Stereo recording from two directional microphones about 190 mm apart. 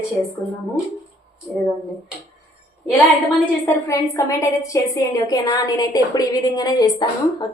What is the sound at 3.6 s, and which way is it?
A woman's voice, 15° left (ahead or behind).